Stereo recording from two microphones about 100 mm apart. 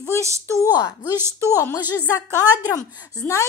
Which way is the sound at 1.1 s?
25° right (ahead or behind).